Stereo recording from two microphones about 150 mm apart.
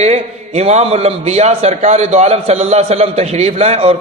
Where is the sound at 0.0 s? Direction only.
45° right (ahead or behind).